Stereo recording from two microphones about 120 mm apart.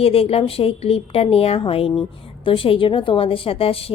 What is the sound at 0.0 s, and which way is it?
A woman's voice, 55° left (ahead or behind).